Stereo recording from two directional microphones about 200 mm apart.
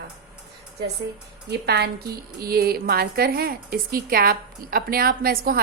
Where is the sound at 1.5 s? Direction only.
55° right (ahead or behind).